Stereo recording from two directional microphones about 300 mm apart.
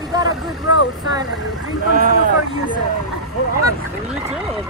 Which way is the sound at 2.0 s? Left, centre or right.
Right.